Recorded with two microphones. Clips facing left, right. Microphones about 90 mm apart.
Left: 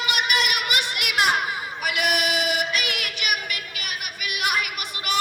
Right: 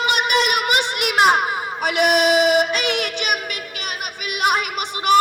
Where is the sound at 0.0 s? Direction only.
30° right (ahead or behind).